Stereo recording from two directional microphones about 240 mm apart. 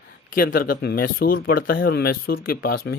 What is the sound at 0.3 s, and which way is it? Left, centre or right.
Speech, left.